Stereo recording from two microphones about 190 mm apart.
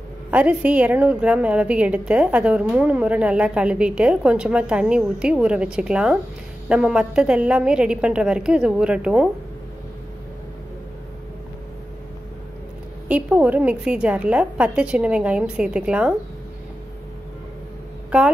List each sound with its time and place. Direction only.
0.3 s a woman's voice: 5° right (ahead or behind)
13.1 s a woman's voice: 5° right (ahead or behind)
18.1 s a woman's voice: 5° right (ahead or behind)